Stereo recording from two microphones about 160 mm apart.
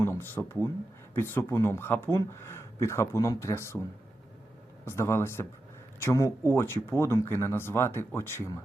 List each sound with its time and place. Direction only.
0.0 s speech: 15° left (ahead or behind)
4.9 s speech: 15° left (ahead or behind)